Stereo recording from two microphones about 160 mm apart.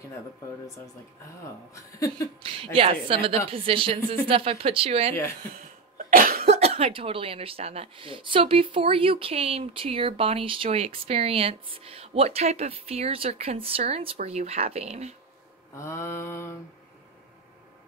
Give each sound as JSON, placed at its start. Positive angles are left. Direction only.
{"t": 1.7, "sound": "speech", "side_deg": 20}
{"t": 2.4, "sound": "speech", "side_deg": -35}
{"t": 5.9, "sound": "cough", "side_deg": -65}
{"t": 6.4, "sound": "speech", "side_deg": -40}
{"t": 15.7, "sound": "mantra", "side_deg": 15}